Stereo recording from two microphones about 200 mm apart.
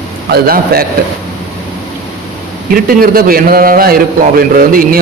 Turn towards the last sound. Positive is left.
turn(degrees=-45)  # may be behind; listen again after turning